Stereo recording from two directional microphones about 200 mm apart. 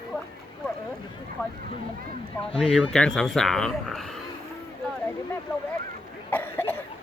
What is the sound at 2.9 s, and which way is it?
Speech, 5° left (ahead or behind).